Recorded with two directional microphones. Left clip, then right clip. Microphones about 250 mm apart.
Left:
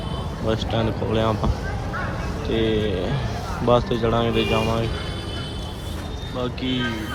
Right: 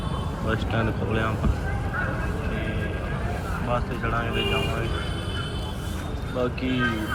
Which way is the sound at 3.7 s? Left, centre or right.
Centre.